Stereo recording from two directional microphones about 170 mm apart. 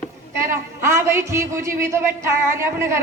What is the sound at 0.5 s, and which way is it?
Speech, 15° right (ahead or behind).